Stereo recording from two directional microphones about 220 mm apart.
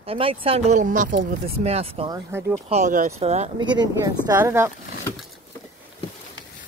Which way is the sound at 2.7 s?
35° right (ahead or behind).